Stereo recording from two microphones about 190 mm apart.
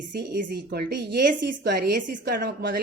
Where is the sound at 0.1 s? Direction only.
60° right (ahead or behind).